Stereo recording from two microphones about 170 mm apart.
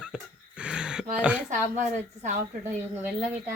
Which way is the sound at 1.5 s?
45° right (ahead or behind).